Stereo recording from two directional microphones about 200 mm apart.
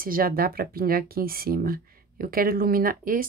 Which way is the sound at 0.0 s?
45° right (ahead or behind).